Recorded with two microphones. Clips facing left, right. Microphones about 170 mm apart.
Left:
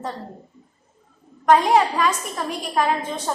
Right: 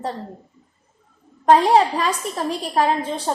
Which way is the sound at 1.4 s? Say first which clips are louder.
Right 2 dB; 30° right (ahead or behind).